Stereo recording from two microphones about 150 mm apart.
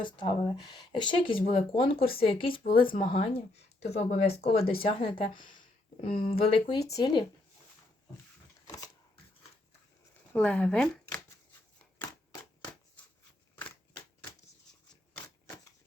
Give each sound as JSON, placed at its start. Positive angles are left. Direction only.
{"t": 0.0, "sound": "speech", "side_deg": 35}
{"t": 8.6, "sound": "power windows", "side_deg": 25}
{"t": 10.3, "sound": "speech", "side_deg": 5}